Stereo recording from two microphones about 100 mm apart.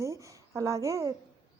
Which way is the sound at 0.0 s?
30° right (ahead or behind).